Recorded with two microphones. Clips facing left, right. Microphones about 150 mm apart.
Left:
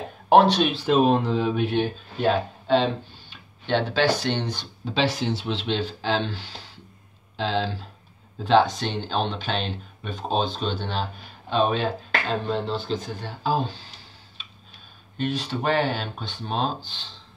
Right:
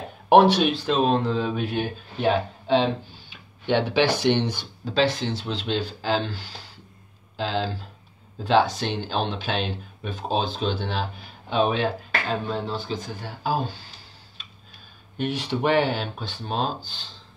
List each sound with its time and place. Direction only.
0.3 s speech: 10° right (ahead or behind)
0.7 s speech: 5° left (ahead or behind)
3.6 s speech: 15° right (ahead or behind)
4.8 s speech: 5° left (ahead or behind)
15.1 s speech: 15° right (ahead or behind)